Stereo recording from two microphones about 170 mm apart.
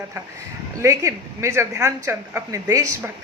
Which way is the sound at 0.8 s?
15° right (ahead or behind).